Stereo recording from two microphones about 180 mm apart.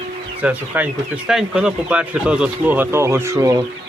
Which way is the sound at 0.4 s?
10° right (ahead or behind).